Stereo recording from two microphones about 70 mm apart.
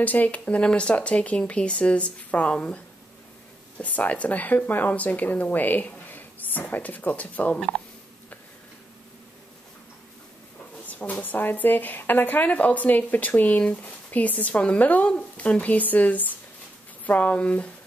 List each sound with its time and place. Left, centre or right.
0.0 s a woman's voice: left
10.9 s a woman's voice: left